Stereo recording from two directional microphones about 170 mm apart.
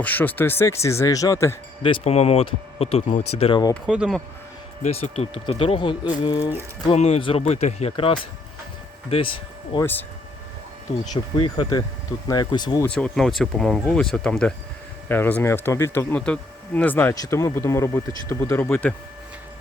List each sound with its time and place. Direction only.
0.0 s speech: 10° left (ahead or behind)
1.8 s speech: 35° left (ahead or behind)
3.8 s speech: 5° right (ahead or behind)
4.8 s speech: 40° left (ahead or behind)
6.9 s speech: 40° left (ahead or behind)
9.8 s speech: 10° left (ahead or behind)
11.3 s speech: 25° left (ahead or behind)
12.8 s speech: 5° left (ahead or behind)